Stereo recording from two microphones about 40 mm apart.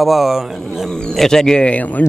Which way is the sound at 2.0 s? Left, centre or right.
Left.